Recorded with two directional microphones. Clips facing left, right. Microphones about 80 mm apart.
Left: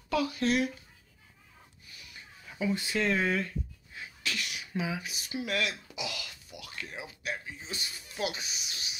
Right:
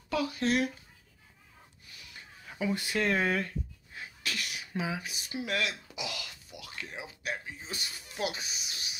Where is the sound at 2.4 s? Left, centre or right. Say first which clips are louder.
Left 1 dB; right.